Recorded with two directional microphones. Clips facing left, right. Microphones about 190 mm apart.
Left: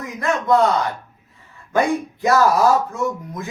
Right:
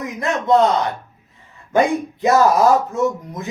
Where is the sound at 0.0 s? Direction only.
20° right (ahead or behind).